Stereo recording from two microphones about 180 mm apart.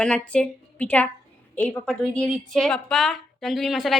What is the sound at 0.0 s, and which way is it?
A woman's voice, 5° left (ahead or behind).